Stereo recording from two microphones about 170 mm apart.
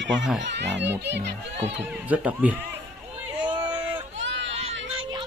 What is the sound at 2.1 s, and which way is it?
Speech, 10° right (ahead or behind).